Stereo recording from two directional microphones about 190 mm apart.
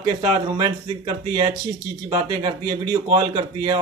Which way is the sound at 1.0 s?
25° right (ahead or behind).